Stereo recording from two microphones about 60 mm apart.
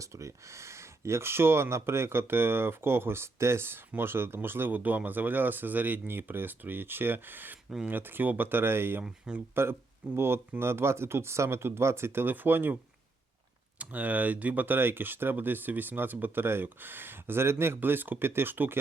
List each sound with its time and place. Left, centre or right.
0.0 s speech: right
9.0 s speech: centre
10.2 s speech: right
13.7 s speech: right